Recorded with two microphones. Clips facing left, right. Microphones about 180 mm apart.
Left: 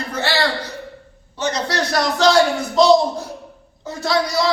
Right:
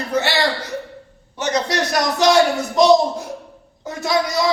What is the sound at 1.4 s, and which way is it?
Speech, 20° right (ahead or behind).